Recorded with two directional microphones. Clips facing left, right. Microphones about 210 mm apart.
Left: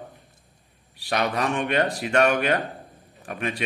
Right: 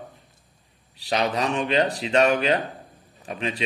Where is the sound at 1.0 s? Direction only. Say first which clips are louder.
Right 1 dB; 25° right (ahead or behind).